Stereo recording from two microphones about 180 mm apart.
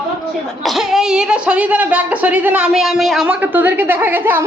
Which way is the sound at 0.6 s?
Centre (ahead or behind).